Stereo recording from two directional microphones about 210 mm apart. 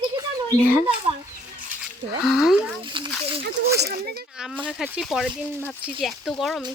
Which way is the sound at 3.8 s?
50° right (ahead or behind).